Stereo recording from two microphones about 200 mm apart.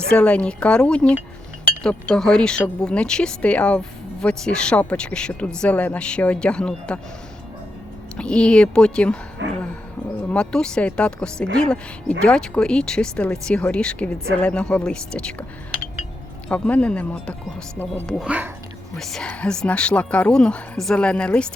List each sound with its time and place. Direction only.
0.1 s speech: 5° left (ahead or behind)
8.1 s speech: 5° left (ahead or behind)
9.4 s a sound: 65° right (ahead or behind)
10.2 s speech: 5° left (ahead or behind)
16.5 s speech: 5° left (ahead or behind)